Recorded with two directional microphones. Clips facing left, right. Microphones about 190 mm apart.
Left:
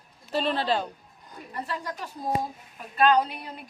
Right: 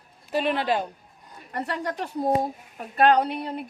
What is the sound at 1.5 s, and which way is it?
A woman's voice, 70° right (ahead or behind).